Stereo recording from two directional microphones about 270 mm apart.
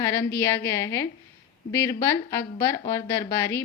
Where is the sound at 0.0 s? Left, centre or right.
Centre.